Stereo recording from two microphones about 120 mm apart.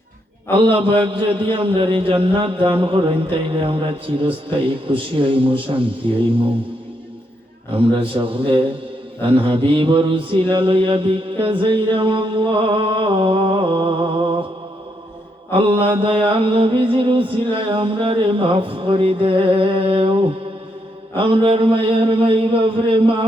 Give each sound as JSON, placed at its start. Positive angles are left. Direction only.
{"t": 0.5, "sound": "a man's voice", "side_deg": -50}
{"t": 7.7, "sound": "a man's voice", "side_deg": -50}
{"t": 15.5, "sound": "a man's voice", "side_deg": -50}